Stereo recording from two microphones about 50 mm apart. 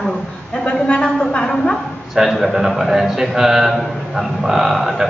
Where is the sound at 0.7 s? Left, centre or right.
Centre.